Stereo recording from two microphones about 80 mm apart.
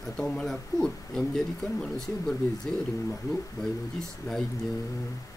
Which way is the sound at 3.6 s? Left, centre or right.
Centre.